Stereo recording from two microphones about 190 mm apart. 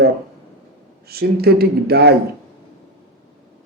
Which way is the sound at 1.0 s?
55° right (ahead or behind).